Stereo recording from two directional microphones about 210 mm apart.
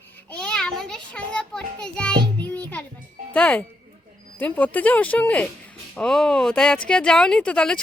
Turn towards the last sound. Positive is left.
turn(degrees=5)  # may be behind; listen again after turning